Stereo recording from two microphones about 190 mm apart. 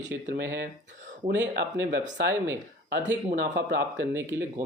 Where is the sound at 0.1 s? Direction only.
70° right (ahead or behind).